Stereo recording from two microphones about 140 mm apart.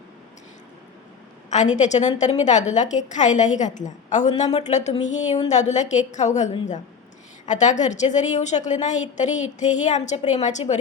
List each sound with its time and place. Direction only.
1.5 s a woman's voice: 60° left (ahead or behind)